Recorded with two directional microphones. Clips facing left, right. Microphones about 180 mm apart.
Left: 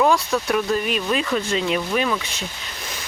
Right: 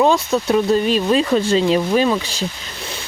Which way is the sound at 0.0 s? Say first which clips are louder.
Right 3 dB; 25° right (ahead or behind).